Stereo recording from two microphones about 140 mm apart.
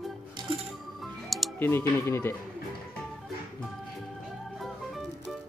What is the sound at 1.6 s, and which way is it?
Speech, 15° left (ahead or behind).